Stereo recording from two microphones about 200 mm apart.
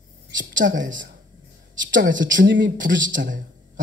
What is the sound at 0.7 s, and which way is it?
A man's voice, 40° right (ahead or behind).